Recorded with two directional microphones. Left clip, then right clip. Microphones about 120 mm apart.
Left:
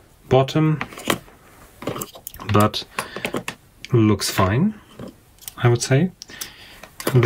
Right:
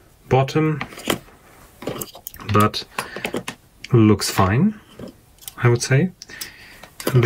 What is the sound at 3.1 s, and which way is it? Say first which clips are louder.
Typing: even; 10° left (ahead or behind).